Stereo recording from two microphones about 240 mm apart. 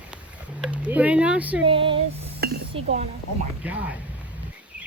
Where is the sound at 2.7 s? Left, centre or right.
Right.